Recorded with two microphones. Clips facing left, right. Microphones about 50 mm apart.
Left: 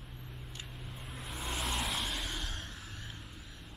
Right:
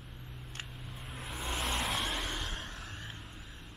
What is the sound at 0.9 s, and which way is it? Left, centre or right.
Vehicle, centre.